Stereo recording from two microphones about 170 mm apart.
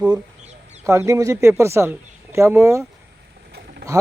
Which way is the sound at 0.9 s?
15° right (ahead or behind).